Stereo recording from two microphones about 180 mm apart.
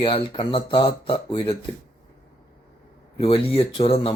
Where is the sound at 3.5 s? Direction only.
30° left (ahead or behind).